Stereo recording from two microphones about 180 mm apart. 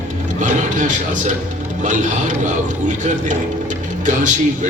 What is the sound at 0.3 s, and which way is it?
A man's voice, 45° right (ahead or behind).